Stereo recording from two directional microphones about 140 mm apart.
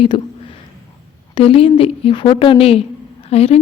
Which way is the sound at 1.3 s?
40° left (ahead or behind).